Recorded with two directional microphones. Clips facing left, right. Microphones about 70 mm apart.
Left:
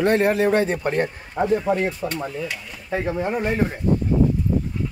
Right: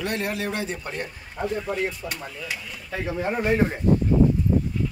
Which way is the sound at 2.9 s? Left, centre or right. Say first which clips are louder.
Left 5 dB; left.